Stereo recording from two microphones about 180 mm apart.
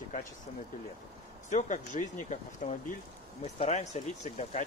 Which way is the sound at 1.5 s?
45° left (ahead or behind).